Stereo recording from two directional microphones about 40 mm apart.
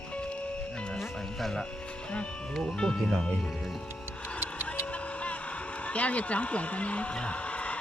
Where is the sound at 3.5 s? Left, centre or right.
Centre.